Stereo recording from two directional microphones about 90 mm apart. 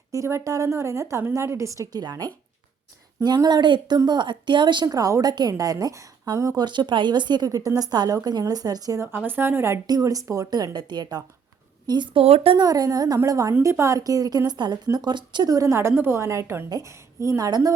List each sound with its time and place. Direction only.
0.1 s a woman's voice: 35° right (ahead or behind)
1.9 s a woman's voice: 50° right (ahead or behind)
4.9 s a woman's voice: 40° right (ahead or behind)
6.7 s a woman's voice: 60° right (ahead or behind); by 9.0 s 40° right (ahead or behind)
9.1 s a woman's voice: 20° right (ahead or behind)
9.8 s a woman's voice: 45° right (ahead or behind)
12.1 s speech: 90° right
12.5 s a woman's voice: 45° right (ahead or behind)
16.6 s a woman's voice: 40° right (ahead or behind)